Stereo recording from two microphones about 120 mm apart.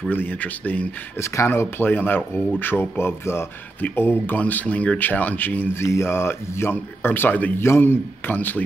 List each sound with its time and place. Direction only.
0.1 s speech: 15° left (ahead or behind)